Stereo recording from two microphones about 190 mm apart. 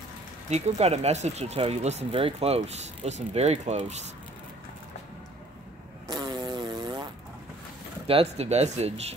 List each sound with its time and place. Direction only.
0.5 s speech: 35° right (ahead or behind)
6.0 s chainsaw: 20° right (ahead or behind)
8.1 s speech: 30° right (ahead or behind)